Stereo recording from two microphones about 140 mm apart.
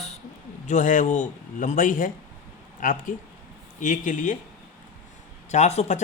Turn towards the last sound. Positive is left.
turn(degrees=55)  # may be behind; listen again after turning